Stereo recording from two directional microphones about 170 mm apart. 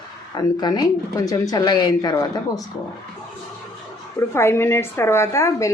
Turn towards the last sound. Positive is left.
turn(degrees=20)  # may be behind; listen again after turning